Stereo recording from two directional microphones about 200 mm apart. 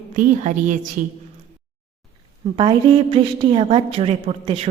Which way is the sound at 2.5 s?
25° right (ahead or behind).